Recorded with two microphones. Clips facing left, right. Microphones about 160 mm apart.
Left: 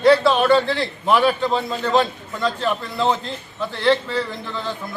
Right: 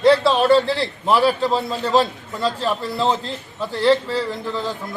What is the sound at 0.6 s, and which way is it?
A man's voice, 35° right (ahead or behind).